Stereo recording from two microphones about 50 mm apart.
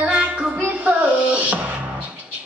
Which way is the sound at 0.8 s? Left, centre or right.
Right.